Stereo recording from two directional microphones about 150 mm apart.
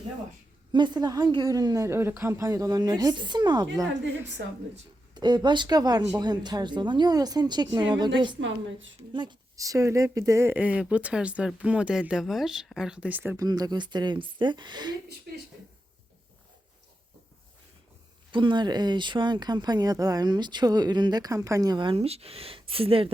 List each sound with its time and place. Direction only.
0.7 s speech: 30° right (ahead or behind)
5.1 s speech: 30° right (ahead or behind); by 13.3 s 10° right (ahead or behind)
13.3 s speech: 25° right (ahead or behind)
15.3 s speech: 90° right
18.3 s speech: 35° right (ahead or behind)